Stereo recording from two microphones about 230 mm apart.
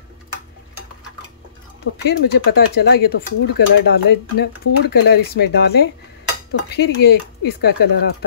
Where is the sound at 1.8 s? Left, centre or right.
Left.